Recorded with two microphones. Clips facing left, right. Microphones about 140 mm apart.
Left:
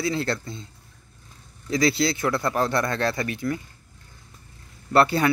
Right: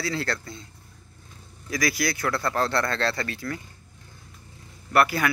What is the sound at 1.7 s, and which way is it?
Speech, 25° left (ahead or behind).